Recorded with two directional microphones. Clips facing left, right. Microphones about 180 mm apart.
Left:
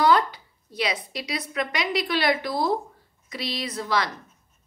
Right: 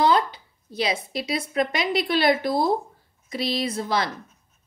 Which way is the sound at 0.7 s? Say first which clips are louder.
Right 3 dB; 25° right (ahead or behind).